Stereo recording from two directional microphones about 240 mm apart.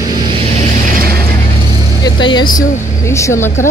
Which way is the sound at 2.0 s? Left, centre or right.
Centre.